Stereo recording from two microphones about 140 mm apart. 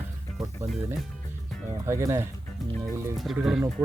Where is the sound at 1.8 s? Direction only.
20° right (ahead or behind).